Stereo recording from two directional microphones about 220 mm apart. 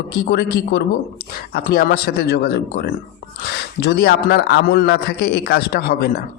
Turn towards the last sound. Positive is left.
turn(degrees=45)  # may be behind; listen again after turning